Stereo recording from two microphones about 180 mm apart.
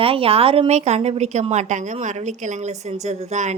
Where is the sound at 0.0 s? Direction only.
30° right (ahead or behind).